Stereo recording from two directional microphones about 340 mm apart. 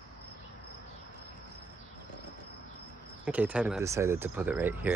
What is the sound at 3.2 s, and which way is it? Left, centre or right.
Speech, centre.